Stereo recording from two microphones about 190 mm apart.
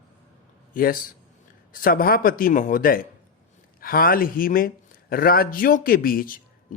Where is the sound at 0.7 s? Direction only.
50° left (ahead or behind).